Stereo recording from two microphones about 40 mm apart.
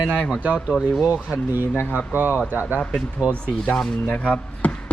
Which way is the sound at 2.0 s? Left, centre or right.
Right.